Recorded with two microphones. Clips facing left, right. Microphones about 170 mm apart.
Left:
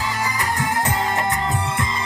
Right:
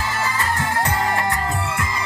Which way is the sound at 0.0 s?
15° left (ahead or behind).